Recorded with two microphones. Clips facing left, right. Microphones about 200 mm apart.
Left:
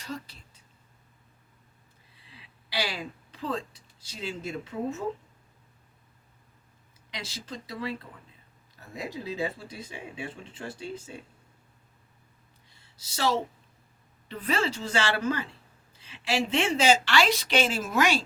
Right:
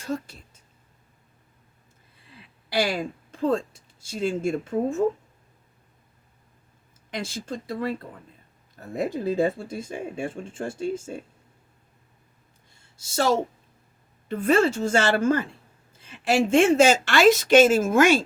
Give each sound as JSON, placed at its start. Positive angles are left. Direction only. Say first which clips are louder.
{"t": 0.0, "sound": "a woman's voice", "louder": "right 8 dB", "side_deg": -45}
{"t": 2.2, "sound": "speech", "louder": "right 4 dB", "side_deg": -50}
{"t": 7.1, "sound": "speech", "louder": "right 8 dB", "side_deg": -50}
{"t": 12.7, "sound": "a sound", "louder": "right 12 dB", "side_deg": -45}
{"t": 14.3, "sound": "speech", "louder": "right 9 dB", "side_deg": -50}